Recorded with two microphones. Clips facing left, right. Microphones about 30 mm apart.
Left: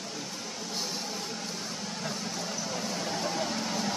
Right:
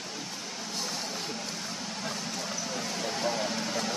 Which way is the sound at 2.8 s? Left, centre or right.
Centre.